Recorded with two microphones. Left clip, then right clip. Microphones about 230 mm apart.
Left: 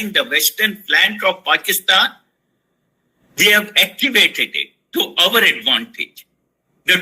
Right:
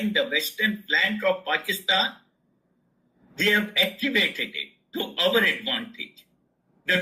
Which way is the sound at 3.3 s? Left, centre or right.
Left.